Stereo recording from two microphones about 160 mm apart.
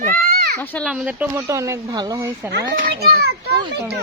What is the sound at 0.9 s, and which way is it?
Speech, 5° right (ahead or behind).